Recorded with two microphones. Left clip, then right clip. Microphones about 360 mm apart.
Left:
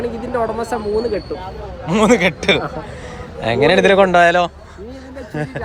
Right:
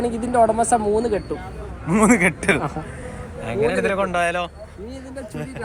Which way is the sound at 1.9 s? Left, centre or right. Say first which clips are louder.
Left 4 dB; centre.